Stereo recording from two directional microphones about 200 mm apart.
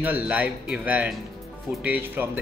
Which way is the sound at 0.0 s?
10° right (ahead or behind).